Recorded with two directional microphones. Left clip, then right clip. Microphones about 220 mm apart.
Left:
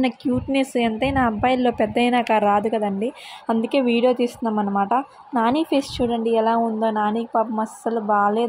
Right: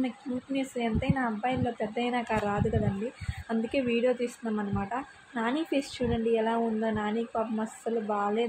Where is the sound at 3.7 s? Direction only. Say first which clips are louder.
Left 8 dB; 35° left (ahead or behind).